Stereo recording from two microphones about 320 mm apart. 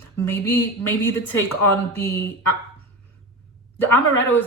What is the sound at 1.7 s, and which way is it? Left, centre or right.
Speech, centre.